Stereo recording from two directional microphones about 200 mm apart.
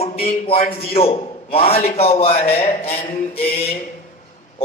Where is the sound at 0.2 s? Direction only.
30° left (ahead or behind).